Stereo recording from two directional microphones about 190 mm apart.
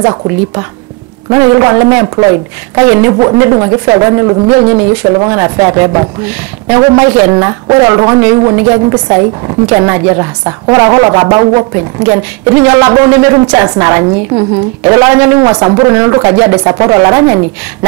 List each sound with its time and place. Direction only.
0.0 s a woman's voice: 20° right (ahead or behind)